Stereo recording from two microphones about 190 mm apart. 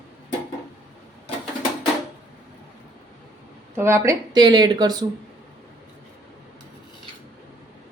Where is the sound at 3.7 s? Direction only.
15° right (ahead or behind).